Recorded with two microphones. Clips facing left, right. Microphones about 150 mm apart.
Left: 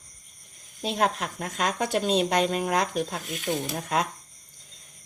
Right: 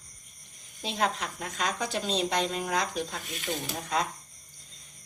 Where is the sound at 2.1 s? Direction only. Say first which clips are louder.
Left 5 dB; 55° left (ahead or behind).